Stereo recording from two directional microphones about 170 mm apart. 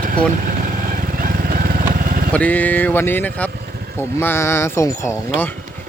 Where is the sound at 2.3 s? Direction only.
10° left (ahead or behind).